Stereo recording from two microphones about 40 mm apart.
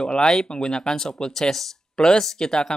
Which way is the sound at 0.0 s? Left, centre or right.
Centre.